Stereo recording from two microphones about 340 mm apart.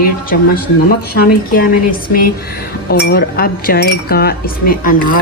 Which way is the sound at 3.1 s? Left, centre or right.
Left.